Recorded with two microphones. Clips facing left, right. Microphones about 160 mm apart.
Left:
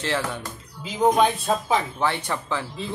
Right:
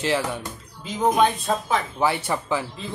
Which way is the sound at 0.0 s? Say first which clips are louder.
Right 3 dB; 10° right (ahead or behind).